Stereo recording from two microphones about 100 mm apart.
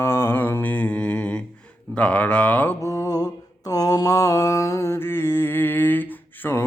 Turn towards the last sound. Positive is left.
turn(degrees=20)  # may be behind; listen again after turning